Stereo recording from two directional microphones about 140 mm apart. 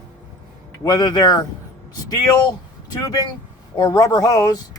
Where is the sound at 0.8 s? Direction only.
30° left (ahead or behind).